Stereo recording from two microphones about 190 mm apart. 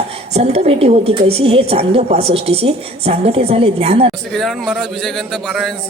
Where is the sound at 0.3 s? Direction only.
35° right (ahead or behind).